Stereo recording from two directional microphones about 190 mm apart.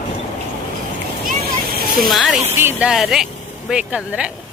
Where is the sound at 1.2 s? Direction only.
55° right (ahead or behind).